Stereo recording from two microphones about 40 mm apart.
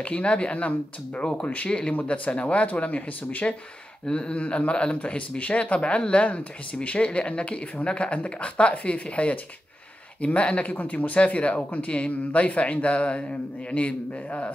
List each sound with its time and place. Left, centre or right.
0.0 s speech: left
1.7 s speech: left
2.0 s speech: left
4.0 s speech: left